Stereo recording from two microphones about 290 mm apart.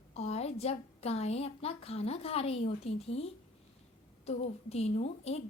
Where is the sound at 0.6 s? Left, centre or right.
Left.